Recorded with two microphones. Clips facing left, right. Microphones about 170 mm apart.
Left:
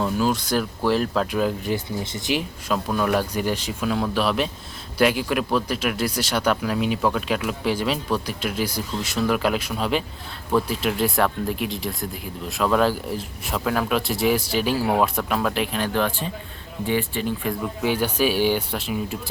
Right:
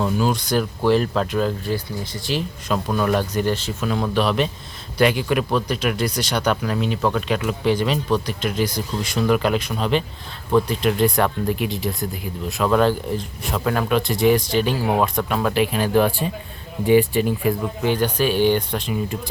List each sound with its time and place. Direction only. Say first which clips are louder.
0.0 s speech: right 1 dB; centre (ahead or behind)
1.7 s speech: even; 20° left (ahead or behind)
2.7 s speech: right 1 dB; centre (ahead or behind)
17.8 s speech: right 2 dB; 10° left (ahead or behind)